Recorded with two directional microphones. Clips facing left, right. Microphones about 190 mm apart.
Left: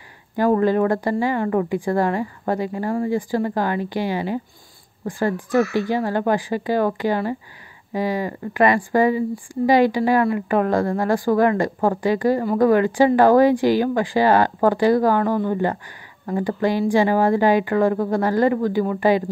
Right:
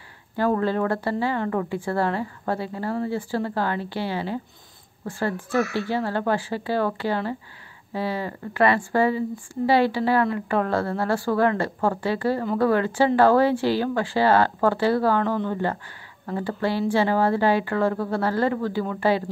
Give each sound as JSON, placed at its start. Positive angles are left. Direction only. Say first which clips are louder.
{"t": 0.4, "sound": "speech", "louder": "left 5 dB", "side_deg": 15}